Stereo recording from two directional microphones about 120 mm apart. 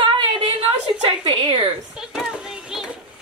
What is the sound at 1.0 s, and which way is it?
Speech, 45° right (ahead or behind).